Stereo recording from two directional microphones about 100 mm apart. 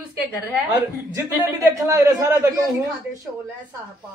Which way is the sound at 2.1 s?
35° right (ahead or behind).